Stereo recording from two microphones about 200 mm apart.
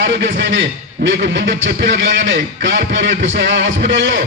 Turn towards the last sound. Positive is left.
turn(degrees=-65)  # may be behind; listen again after turning